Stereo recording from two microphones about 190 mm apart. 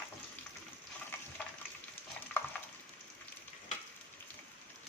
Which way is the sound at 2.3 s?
Centre (ahead or behind).